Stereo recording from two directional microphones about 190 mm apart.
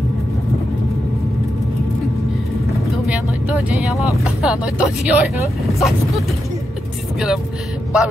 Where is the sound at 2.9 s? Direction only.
5° right (ahead or behind).